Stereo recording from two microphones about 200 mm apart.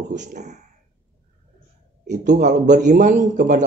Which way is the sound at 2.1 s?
40° right (ahead or behind).